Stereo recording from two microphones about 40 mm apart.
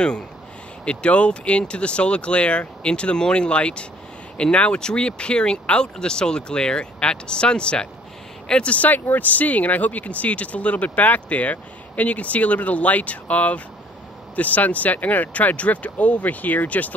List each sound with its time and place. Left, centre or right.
0.8 s speech: left
8.7 s speech: left